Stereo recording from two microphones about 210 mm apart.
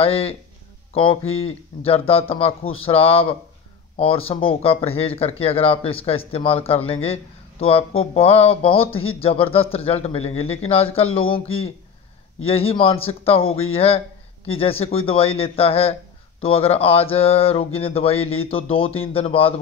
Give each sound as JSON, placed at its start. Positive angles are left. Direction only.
{"t": 0.0, "sound": "speech", "side_deg": 25}